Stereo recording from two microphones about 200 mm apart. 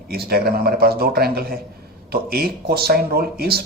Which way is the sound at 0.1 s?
50° right (ahead or behind).